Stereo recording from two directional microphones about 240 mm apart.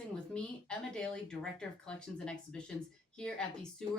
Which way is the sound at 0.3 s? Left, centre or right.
Centre.